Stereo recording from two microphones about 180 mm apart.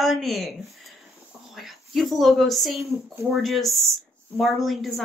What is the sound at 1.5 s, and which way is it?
A woman's voice, centre (ahead or behind).